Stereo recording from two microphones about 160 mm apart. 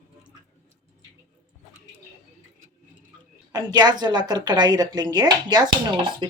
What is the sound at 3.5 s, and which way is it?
A woman's voice, 25° right (ahead or behind).